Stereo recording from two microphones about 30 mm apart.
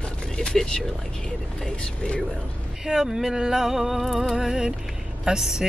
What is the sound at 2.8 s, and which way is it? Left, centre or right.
Speech, centre.